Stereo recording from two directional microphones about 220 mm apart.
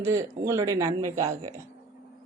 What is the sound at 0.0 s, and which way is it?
A woman's voice, 15° right (ahead or behind).